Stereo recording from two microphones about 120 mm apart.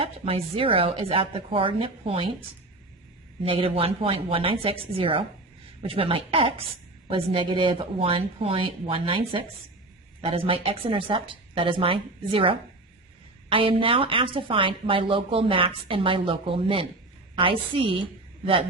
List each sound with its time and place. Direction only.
0.0 s speech: 55° right (ahead or behind)
3.4 s speech: 50° right (ahead or behind)